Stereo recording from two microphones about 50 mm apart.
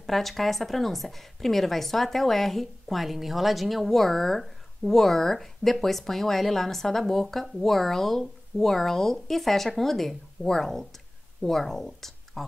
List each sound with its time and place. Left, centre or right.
0.0 s a woman's voice: centre